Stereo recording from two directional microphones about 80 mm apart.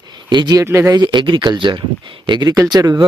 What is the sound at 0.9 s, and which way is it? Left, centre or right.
Speech, right.